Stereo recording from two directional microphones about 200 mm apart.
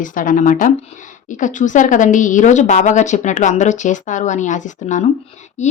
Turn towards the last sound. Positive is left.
turn(degrees=35)  # may be behind; listen again after turning